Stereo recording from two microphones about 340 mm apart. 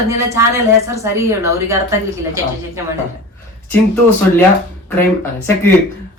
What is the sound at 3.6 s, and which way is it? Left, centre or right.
Speech, centre.